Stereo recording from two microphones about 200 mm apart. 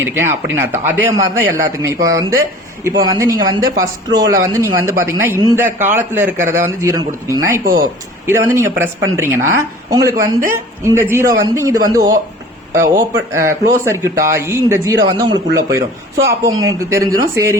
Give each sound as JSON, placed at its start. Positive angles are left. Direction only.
{"t": 0.0, "sound": "speech", "side_deg": -10}
{"t": 7.6, "sound": "speech", "side_deg": -45}
{"t": 8.3, "sound": "speech", "side_deg": -15}